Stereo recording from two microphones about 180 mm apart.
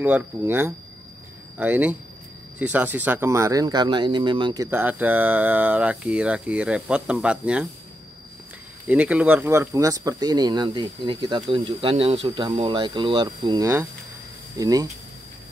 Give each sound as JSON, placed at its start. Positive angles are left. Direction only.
{"t": 0.0, "sound": "speech", "side_deg": -10}
{"t": 4.6, "sound": "speech", "side_deg": -10}
{"t": 8.8, "sound": "speech", "side_deg": -10}